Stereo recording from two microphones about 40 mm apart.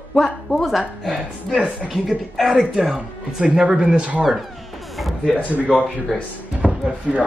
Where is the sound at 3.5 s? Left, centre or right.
Centre.